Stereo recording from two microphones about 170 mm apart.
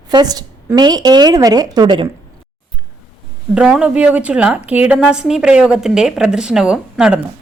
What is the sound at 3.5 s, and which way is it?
A woman's voice, 5° right (ahead or behind).